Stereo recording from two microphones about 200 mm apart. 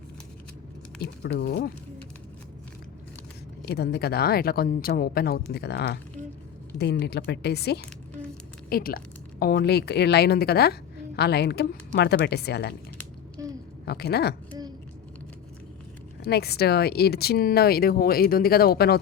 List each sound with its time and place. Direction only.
0.9 s a woman's voice: 60° left (ahead or behind)
3.7 s a woman's voice: 55° left (ahead or behind)
13.8 s speech: 55° left (ahead or behind)
16.2 s speech: 55° left (ahead or behind)